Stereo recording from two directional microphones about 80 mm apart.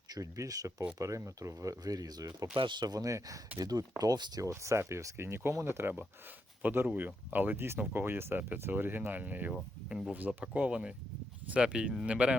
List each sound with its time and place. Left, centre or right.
0.1 s speech: right
2.6 s speech: right
4.4 s speech: right; by 12.4 s centre